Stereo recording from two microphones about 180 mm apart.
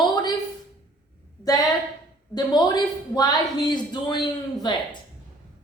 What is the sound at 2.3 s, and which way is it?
Speech, 20° left (ahead or behind).